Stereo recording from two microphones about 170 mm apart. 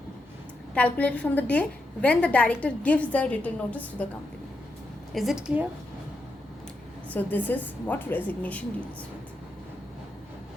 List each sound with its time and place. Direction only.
0.7 s a woman's voice: 10° left (ahead or behind)
5.1 s a woman's voice: centre (ahead or behind)
7.1 s a woman's voice: 10° left (ahead or behind)